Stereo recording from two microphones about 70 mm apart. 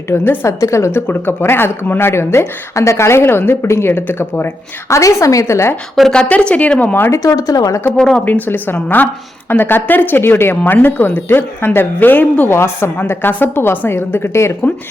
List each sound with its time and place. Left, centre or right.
0.1 s speech: left
4.9 s speech: left
6.0 s speech: centre
7.1 s speech: left
7.9 s speech: centre
8.2 s speech: left
12.5 s speech: left